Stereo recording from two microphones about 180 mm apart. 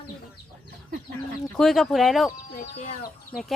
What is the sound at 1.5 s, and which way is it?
Speech, centre (ahead or behind).